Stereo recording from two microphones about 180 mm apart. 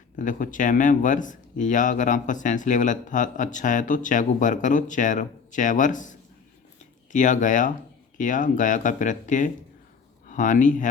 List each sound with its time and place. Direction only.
0.2 s speech: 45° left (ahead or behind)